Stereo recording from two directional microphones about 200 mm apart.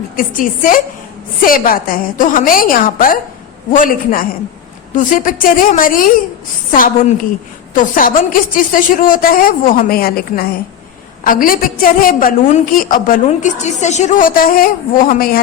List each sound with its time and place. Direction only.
0.2 s a woman's voice: 40° left (ahead or behind)